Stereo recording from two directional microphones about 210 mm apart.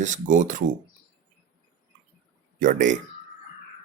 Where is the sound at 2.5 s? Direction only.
40° right (ahead or behind).